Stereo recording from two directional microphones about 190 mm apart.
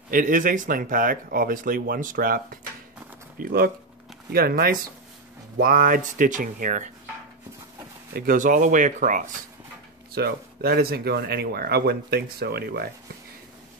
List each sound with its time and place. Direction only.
0.1 s speech: 45° right (ahead or behind)
8.1 s speech: 45° right (ahead or behind)
10.1 s speech: 55° right (ahead or behind)